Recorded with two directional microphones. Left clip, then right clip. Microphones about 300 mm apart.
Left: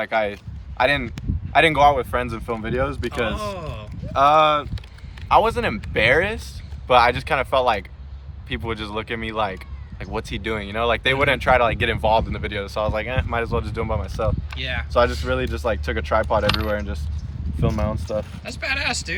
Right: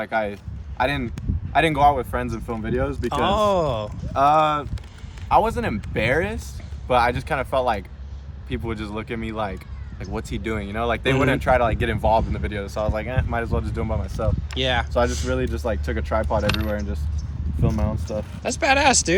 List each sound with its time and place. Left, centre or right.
0.0 s speech: centre
3.3 s speech: centre
4.1 s speech: centre